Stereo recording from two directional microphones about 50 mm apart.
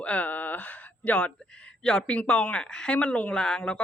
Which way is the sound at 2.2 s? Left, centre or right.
Left.